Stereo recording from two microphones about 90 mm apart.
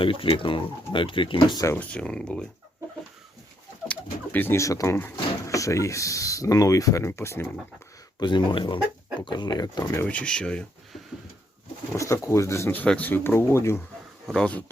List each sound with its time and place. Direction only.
0.0 s speech: 75° left (ahead or behind)
1.7 s speech: 15° left (ahead or behind)
3.8 s pigeon: 20° left (ahead or behind)
4.5 s speech: 35° left (ahead or behind)
8.2 s speech: 60° left (ahead or behind)
10.1 s speech: 15° left (ahead or behind)
11.9 s speech: 30° left (ahead or behind)
14.3 s speech: 10° left (ahead or behind)